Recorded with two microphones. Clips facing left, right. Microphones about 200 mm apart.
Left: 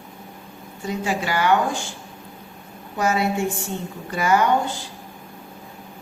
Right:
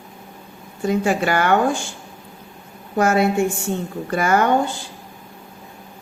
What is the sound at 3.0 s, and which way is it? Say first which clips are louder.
A woman's voice: right 5 dB; 50° right (ahead or behind).